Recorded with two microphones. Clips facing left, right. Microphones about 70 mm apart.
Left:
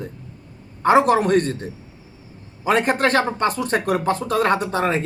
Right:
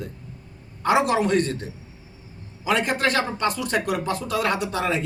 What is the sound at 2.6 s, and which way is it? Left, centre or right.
Speech, left.